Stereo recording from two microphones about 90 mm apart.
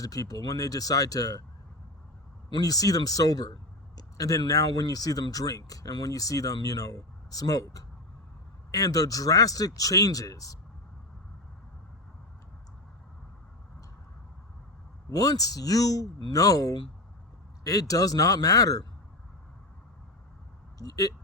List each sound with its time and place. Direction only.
0.0 s speech: 40° left (ahead or behind)
2.5 s speech: 45° left (ahead or behind)
15.1 s speech: 45° left (ahead or behind)
20.7 s a sound: 40° left (ahead or behind)